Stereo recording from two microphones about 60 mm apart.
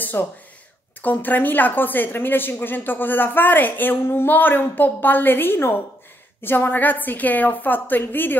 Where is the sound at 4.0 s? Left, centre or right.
Left.